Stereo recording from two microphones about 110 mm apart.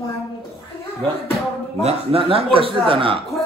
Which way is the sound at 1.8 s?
65° right (ahead or behind).